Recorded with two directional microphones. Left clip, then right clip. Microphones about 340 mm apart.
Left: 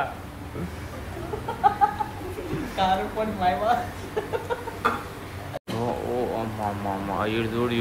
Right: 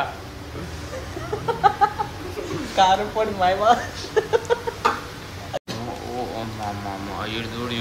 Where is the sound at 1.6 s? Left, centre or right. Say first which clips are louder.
Right 3 dB; right.